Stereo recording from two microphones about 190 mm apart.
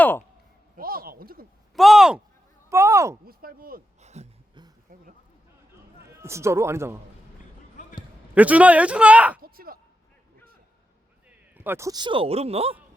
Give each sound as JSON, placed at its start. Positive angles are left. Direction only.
{"t": 0.8, "sound": "a sound", "side_deg": -50}
{"t": 1.7, "sound": "speech", "side_deg": 0}
{"t": 2.6, "sound": "speech", "side_deg": -15}
{"t": 3.2, "sound": "speech", "side_deg": -50}
{"t": 4.0, "sound": "a sound", "side_deg": -35}
{"t": 6.1, "sound": "speech", "side_deg": -15}
{"t": 8.4, "sound": "speech", "side_deg": -5}
{"t": 9.4, "sound": "a sound", "side_deg": -50}
{"t": 11.3, "sound": "a man's voice", "side_deg": -10}